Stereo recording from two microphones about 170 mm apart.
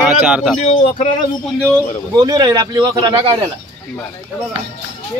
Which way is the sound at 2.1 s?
20° right (ahead or behind).